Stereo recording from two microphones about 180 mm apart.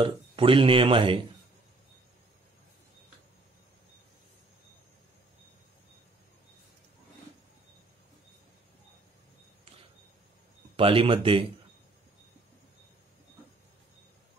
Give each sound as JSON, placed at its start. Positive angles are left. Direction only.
{"t": 0.0, "sound": "speech", "side_deg": -30}
{"t": 10.8, "sound": "speech", "side_deg": -30}